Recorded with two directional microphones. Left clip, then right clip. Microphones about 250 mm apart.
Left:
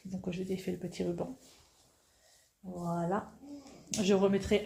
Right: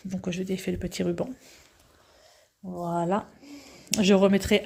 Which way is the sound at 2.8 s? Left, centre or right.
Right.